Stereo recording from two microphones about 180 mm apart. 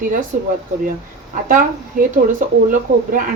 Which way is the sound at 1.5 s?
45° right (ahead or behind).